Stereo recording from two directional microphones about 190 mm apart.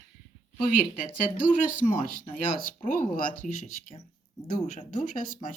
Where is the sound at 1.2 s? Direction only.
45° left (ahead or behind).